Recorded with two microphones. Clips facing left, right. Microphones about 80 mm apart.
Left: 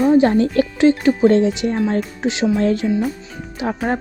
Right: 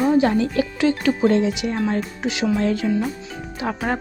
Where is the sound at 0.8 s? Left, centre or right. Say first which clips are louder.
Left 5 dB; left.